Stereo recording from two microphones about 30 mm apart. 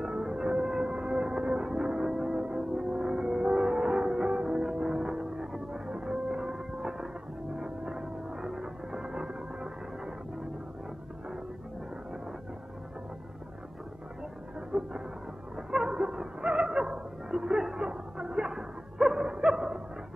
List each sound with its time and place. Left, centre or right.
0.2 s music: right
7.6 s vehicle: right
14.7 s a sound: right
17.7 s music: right
19.2 s dog: right